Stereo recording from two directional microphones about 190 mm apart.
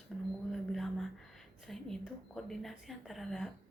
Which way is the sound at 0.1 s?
Centre (ahead or behind).